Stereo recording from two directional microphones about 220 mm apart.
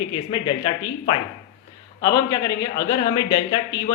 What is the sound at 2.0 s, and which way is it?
A man's voice, 15° left (ahead or behind).